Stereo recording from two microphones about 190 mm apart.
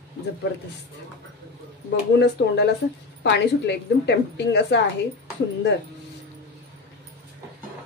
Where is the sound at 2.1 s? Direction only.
60° left (ahead or behind).